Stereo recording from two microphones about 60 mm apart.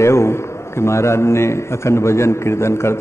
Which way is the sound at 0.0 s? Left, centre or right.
Left.